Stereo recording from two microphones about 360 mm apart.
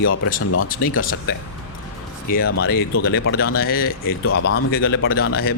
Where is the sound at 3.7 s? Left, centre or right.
Left.